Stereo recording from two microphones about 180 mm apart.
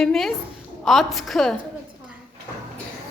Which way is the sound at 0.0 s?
Centre (ahead or behind).